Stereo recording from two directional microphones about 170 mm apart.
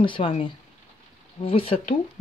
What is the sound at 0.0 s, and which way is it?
Speech, 30° left (ahead or behind).